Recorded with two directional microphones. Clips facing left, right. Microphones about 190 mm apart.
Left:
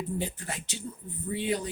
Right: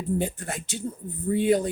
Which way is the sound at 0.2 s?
50° right (ahead or behind).